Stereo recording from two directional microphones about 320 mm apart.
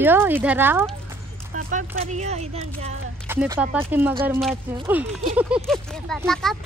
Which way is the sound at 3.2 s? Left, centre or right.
Centre.